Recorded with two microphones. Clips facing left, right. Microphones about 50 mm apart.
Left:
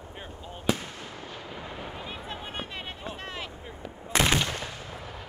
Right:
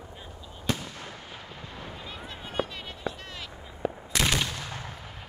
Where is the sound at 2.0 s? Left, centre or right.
Left.